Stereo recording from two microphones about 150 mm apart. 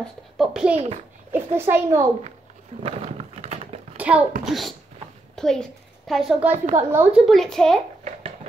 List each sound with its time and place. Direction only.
0.0 s a woman's voice: centre (ahead or behind)
0.7 s a child's voice: 45° right (ahead or behind)
1.6 s a child's voice: 20° right (ahead or behind)
2.8 s a sound: 40° right (ahead or behind)
3.9 s a sound: 10° right (ahead or behind)
4.5 s a woman's voice: centre (ahead or behind)
6.5 s a woman's voice: 50° right (ahead or behind)
6.9 s a woman's voice: 10° right (ahead or behind)